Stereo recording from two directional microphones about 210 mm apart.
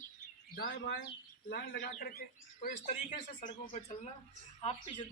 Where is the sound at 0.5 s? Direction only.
55° left (ahead or behind); by 3.9 s 35° left (ahead or behind).